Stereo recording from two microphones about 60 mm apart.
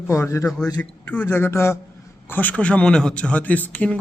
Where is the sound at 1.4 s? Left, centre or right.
Left.